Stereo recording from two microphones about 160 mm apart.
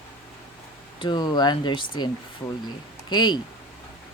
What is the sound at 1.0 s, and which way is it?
Speech, 25° left (ahead or behind).